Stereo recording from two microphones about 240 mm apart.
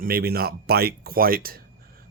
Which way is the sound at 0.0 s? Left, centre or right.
Right.